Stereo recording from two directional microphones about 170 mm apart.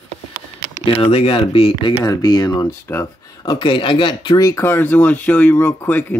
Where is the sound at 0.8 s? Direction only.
35° left (ahead or behind); by 6.1 s 10° left (ahead or behind).